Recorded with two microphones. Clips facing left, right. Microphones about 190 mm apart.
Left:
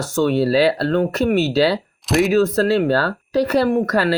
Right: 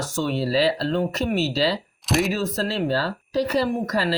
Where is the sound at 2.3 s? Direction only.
70° left (ahead or behind).